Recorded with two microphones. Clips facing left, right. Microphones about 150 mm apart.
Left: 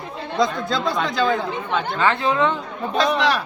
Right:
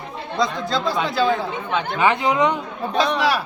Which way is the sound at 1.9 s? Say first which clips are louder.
Right 2 dB; 15° right (ahead or behind).